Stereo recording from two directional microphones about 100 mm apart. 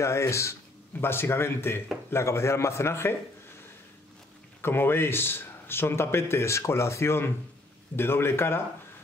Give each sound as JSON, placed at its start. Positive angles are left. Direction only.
{"t": 0.0, "sound": "a man's voice", "side_deg": 30}
{"t": 4.6, "sound": "a man's voice", "side_deg": 25}